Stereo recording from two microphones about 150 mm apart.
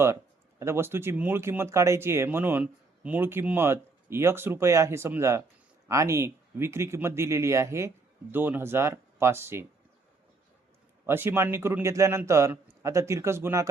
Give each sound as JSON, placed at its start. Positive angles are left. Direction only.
{"t": 0.6, "sound": "speech", "side_deg": -15}
{"t": 11.0, "sound": "speech", "side_deg": -15}